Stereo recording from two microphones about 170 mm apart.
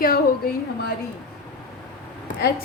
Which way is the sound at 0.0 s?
60° left (ahead or behind).